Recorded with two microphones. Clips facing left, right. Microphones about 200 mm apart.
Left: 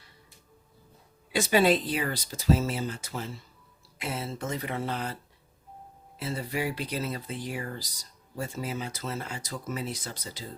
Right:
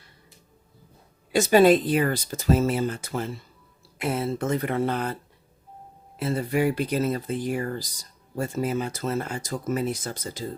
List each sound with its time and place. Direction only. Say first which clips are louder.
1.3 s speech: right 6 dB; 45° right (ahead or behind)
6.1 s speech: right 7 dB; 55° right (ahead or behind)